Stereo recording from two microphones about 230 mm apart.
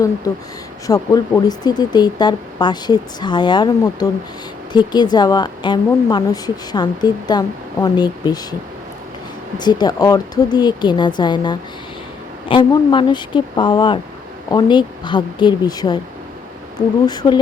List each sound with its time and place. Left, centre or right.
0.9 s a woman's voice: centre
9.6 s speech: centre
17.1 s speech: centre